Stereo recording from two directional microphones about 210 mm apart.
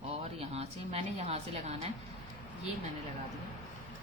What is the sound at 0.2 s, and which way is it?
A woman's voice, 30° right (ahead or behind).